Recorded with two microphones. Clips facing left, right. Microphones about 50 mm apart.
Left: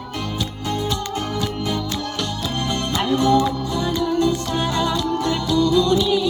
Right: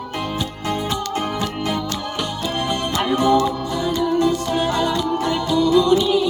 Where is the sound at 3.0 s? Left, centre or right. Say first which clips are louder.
Even; centre.